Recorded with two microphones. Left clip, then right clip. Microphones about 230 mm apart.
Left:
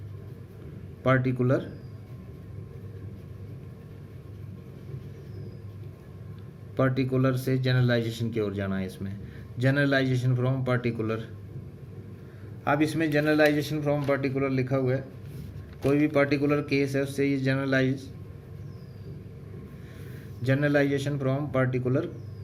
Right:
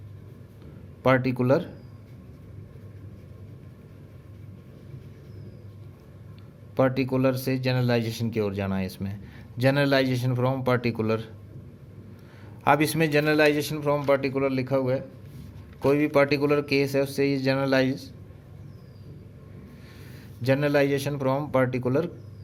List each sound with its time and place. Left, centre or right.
1.0 s speech: right
6.7 s speech: right
12.6 s a man's voice: right
20.4 s a man's voice: right